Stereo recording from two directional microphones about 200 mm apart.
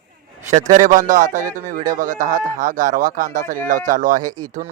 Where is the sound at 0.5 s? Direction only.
40° right (ahead or behind).